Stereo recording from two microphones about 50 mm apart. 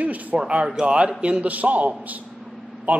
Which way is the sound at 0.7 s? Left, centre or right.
Centre.